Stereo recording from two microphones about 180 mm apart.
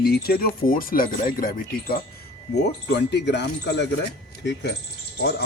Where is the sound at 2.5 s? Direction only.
70° left (ahead or behind).